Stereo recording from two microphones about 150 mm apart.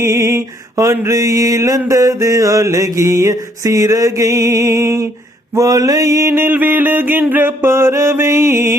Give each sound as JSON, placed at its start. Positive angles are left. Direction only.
{"t": 0.0, "sound": "mantra", "side_deg": -20}